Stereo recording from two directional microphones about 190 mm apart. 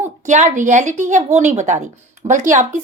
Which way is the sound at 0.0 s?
40° right (ahead or behind).